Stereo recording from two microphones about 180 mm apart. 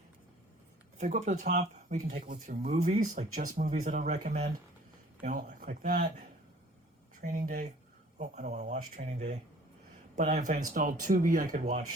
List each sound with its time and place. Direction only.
0.9 s speech: 40° right (ahead or behind)
2.3 s speech: 55° right (ahead or behind)
2.6 s speech: 40° right (ahead or behind)